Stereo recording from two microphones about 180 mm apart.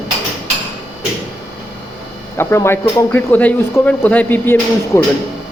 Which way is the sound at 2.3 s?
15° left (ahead or behind).